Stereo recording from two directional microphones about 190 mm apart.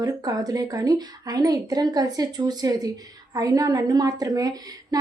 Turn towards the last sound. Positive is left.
turn(degrees=-20)  # may be behind; listen again after turning